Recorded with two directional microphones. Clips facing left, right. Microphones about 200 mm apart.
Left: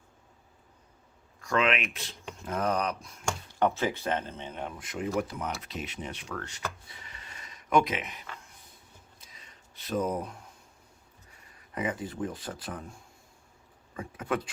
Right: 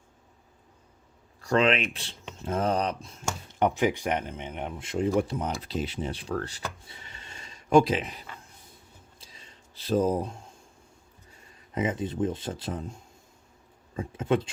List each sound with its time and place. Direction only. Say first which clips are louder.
1.4 s speech: right 4 dB; 35° right (ahead or behind)
5.5 s wood: right 7 dB; 30° right (ahead or behind)
9.1 s a sound: right 3 dB; 30° right (ahead or behind)
11.3 s speech: right 3 dB; 25° right (ahead or behind)